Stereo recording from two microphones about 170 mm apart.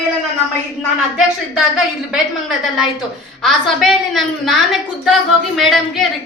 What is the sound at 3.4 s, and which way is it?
Speech, centre (ahead or behind).